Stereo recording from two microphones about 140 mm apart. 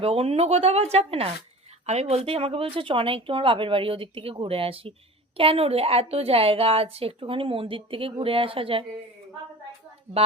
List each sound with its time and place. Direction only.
0.0 s a woman's voice: 45° right (ahead or behind)